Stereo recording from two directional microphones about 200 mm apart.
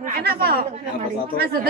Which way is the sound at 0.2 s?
50° right (ahead or behind).